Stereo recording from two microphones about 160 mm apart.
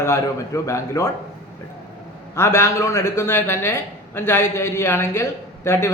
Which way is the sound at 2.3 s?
15° left (ahead or behind).